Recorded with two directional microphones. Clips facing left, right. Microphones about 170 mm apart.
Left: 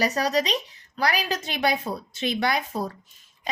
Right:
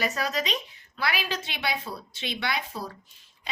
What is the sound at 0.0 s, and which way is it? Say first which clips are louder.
A woman's voice: left 5 dB; 40° left (ahead or behind).